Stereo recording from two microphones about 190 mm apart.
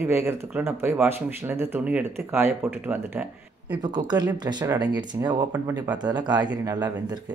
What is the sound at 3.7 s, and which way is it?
Speech, 20° right (ahead or behind).